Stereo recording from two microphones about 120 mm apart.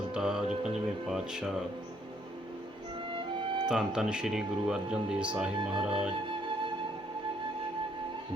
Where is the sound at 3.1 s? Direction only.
35° right (ahead or behind).